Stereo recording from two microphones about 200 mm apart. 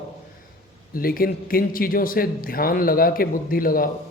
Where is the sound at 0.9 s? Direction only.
45° left (ahead or behind).